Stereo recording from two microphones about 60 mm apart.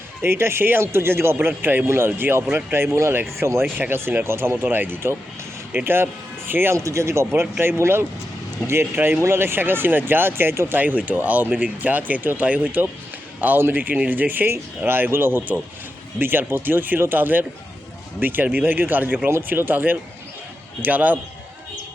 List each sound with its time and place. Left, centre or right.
0.2 s speech: right
3.6 s speech: right
6.7 s speech: right
10.8 s speech: right
19.3 s speech: right